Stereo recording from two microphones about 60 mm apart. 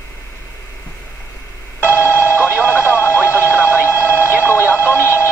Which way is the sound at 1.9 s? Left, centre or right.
Left.